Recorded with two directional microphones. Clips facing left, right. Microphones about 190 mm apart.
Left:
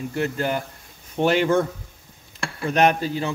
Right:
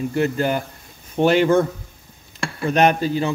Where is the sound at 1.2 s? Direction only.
75° right (ahead or behind).